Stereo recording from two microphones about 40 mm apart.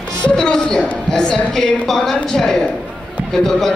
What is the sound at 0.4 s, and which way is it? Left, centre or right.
A woman's voice, centre.